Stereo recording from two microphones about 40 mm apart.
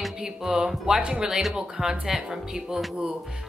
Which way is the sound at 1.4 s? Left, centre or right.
Centre.